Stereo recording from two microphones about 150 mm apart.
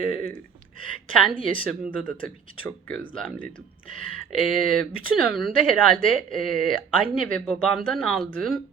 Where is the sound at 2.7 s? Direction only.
10° left (ahead or behind).